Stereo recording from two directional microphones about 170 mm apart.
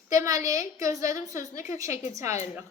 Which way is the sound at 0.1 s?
20° right (ahead or behind).